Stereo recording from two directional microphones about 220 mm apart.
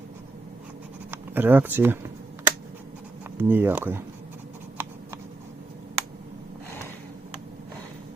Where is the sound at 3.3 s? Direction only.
10° right (ahead or behind).